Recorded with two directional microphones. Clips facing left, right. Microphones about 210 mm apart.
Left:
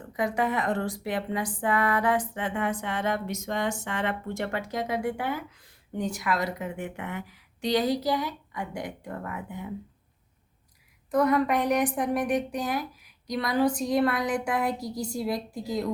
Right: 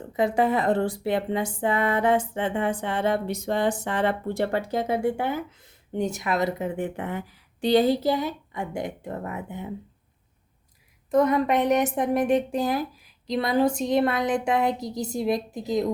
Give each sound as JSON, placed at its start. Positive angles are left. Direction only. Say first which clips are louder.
{"t": 0.0, "sound": "speech", "louder": "right 5 dB", "side_deg": -25}
{"t": 11.1, "sound": "speech", "louder": "right 2 dB", "side_deg": -20}